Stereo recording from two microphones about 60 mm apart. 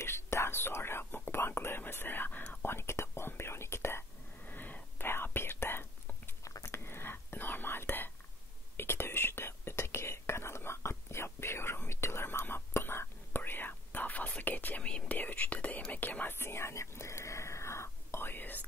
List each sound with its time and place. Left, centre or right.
0.0 s whispering: left
2.6 s whispering: left
4.5 s whispering: left
14.8 s whispering: centre
15.1 s whispering: left
16.3 s whispering: left